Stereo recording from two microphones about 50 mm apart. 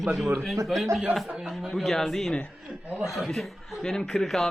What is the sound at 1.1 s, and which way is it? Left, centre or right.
Speech, right.